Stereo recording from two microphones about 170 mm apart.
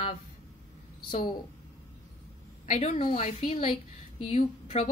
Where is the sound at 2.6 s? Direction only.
40° left (ahead or behind).